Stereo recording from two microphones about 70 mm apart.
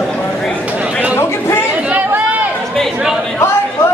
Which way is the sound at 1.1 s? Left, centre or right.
Left.